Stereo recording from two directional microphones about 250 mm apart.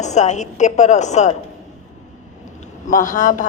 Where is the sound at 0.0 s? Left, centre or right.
Left.